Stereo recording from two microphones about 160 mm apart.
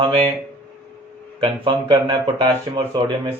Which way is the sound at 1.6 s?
30° right (ahead or behind).